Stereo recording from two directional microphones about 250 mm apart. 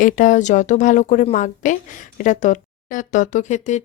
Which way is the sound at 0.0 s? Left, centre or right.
Left.